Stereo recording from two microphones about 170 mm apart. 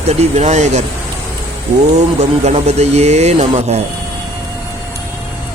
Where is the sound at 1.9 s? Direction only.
40° right (ahead or behind).